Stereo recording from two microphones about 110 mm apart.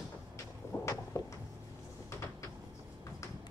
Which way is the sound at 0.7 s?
20° left (ahead or behind).